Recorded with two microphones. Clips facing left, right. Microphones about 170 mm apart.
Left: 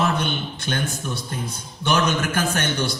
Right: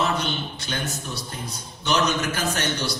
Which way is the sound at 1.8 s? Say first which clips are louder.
Left 2 dB; 50° left (ahead or behind).